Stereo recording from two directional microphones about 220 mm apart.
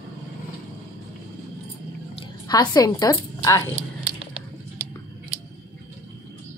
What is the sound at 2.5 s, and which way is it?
A woman's voice, 15° left (ahead or behind).